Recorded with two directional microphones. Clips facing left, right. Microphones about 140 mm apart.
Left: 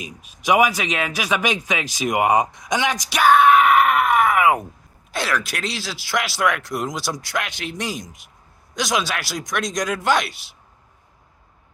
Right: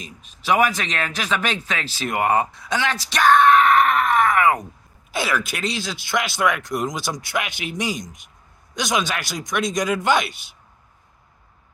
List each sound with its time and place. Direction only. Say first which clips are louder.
0.0 s speech: left 4 dB; 10° left (ahead or behind)
5.1 s speech: even; centre (ahead or behind)